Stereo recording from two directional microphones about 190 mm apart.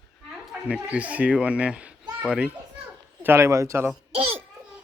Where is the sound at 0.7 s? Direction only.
5° right (ahead or behind).